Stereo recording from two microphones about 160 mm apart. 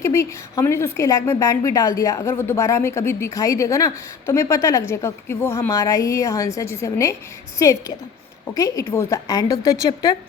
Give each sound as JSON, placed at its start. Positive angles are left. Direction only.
{"t": 0.0, "sound": "a woman's voice", "side_deg": 15}